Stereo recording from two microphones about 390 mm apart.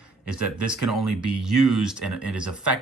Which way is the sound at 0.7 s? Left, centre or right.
Centre.